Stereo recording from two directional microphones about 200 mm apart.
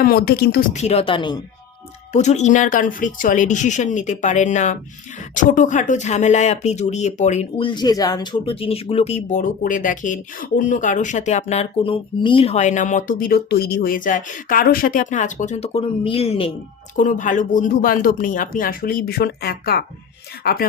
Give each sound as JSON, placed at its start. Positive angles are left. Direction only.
{"t": 0.0, "sound": "speech", "side_deg": 50}
{"t": 0.7, "sound": "speech", "side_deg": 35}
{"t": 2.1, "sound": "speech", "side_deg": 35}
{"t": 7.7, "sound": "speech", "side_deg": 20}
{"t": 17.0, "sound": "speech", "side_deg": 40}